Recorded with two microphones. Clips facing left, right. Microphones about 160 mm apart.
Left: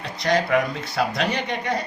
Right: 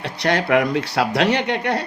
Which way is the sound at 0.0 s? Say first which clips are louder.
Right 1 dB; 70° right (ahead or behind).